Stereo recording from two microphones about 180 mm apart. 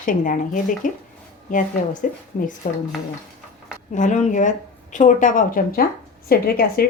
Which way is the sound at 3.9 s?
45° left (ahead or behind).